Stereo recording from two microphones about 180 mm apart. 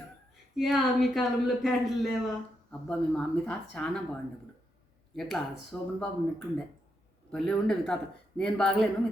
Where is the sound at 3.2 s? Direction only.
5° left (ahead or behind).